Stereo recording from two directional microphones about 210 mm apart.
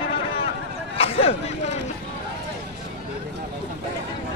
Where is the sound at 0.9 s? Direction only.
30° left (ahead or behind).